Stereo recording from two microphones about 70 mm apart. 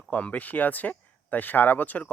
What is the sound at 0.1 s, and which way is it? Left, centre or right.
Speech, centre.